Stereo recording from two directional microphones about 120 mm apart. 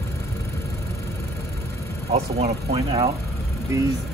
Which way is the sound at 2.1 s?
65° right (ahead or behind).